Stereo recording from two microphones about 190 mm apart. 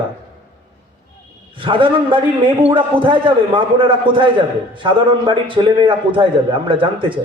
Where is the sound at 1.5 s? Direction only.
25° right (ahead or behind).